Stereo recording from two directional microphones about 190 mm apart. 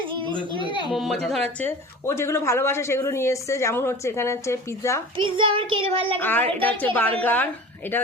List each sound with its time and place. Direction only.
0.0 s a child's voice: 25° right (ahead or behind)
0.9 s speech: centre (ahead or behind)
5.1 s a child's voice: 25° right (ahead or behind)
6.1 s speech: 10° left (ahead or behind)